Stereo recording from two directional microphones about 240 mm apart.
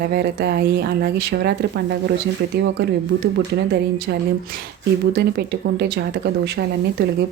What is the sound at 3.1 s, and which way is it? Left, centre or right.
Speech, right.